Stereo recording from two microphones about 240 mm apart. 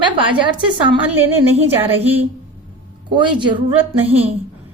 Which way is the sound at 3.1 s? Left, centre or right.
Centre.